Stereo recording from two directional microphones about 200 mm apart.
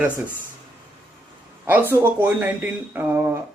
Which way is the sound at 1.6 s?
10° right (ahead or behind).